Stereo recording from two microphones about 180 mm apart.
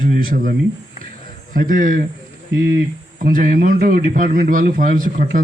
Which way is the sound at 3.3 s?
50° right (ahead or behind).